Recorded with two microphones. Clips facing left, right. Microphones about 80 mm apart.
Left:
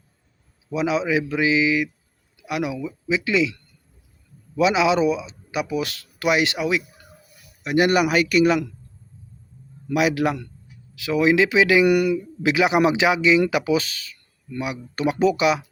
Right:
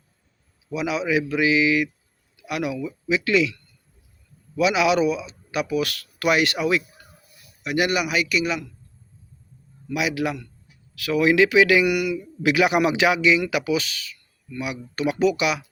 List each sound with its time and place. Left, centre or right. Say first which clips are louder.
0.7 s speech: left 2 dB; left; by 6.8 s centre
7.6 s a man's voice: left 4 dB; left
9.9 s a man's voice: left 4 dB; left
10.9 s speech: even; left
11.9 s speech: left 5 dB; left
12.4 s speech: even; left